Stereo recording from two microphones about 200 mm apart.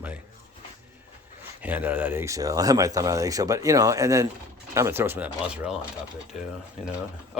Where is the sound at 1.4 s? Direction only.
10° right (ahead or behind).